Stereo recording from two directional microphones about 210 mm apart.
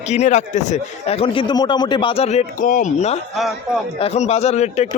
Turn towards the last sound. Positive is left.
turn(degrees=30)  # may be behind; listen again after turning